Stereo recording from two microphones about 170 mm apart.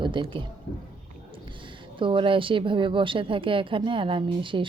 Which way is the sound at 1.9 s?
30° right (ahead or behind).